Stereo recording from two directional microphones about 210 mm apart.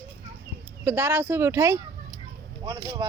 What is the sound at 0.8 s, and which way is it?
Speech, 10° right (ahead or behind).